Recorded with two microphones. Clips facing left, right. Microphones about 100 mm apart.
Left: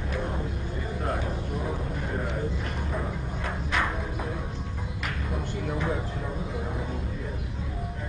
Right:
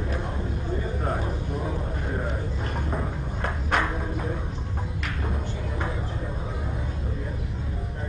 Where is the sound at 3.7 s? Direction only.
55° right (ahead or behind).